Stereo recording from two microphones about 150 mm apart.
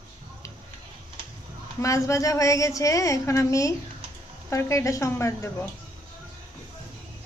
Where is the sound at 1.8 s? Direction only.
20° left (ahead or behind).